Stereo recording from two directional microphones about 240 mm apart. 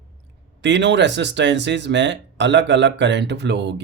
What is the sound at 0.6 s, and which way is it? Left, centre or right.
Speech, right.